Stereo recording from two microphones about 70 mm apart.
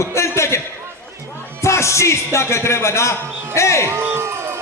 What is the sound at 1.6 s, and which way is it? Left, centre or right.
A man's voice, left.